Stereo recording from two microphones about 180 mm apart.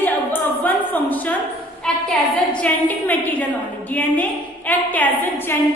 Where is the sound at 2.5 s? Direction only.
10° left (ahead or behind).